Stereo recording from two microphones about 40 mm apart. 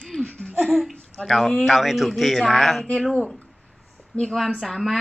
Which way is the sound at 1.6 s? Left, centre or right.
Centre.